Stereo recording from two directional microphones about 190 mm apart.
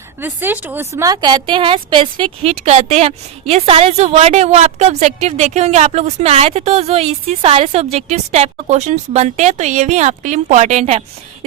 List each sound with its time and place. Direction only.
0.2 s speech: 10° right (ahead or behind); by 11.0 s 35° right (ahead or behind)